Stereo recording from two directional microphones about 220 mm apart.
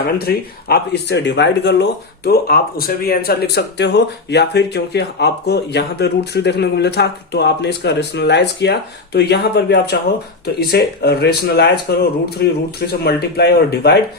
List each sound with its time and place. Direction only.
0.2 s speech: 45° left (ahead or behind)